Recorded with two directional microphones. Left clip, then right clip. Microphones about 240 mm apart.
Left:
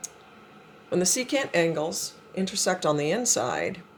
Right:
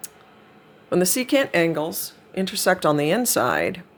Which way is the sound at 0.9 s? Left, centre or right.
Right.